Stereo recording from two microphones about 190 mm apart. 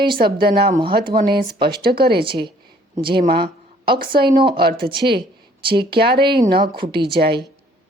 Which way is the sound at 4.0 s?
50° right (ahead or behind).